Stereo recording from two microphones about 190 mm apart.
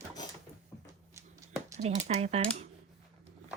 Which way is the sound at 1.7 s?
35° right (ahead or behind).